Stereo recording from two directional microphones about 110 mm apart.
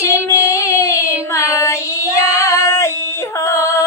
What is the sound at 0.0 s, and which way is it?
Child singing, 25° left (ahead or behind).